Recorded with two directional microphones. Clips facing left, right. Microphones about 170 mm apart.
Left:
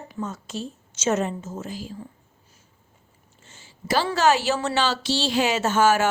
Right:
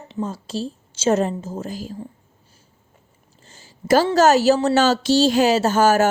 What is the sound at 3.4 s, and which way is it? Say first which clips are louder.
A woman's voice: right 4 dB; 35° right (ahead or behind).